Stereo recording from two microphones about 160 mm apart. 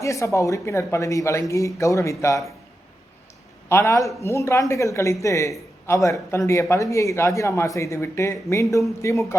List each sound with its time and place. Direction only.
0.0 s speech: 20° left (ahead or behind)
3.7 s a man's voice: 15° left (ahead or behind)